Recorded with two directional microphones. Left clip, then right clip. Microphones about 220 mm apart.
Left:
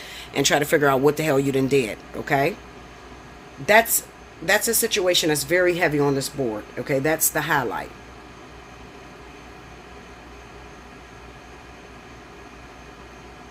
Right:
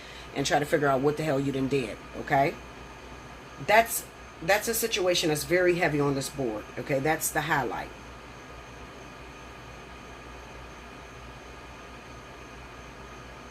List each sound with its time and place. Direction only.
0.3 s speech: 50° left (ahead or behind)
4.4 s speech: 50° left (ahead or behind)